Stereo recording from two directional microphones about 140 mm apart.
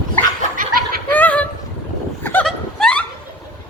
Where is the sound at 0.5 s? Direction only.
90° right.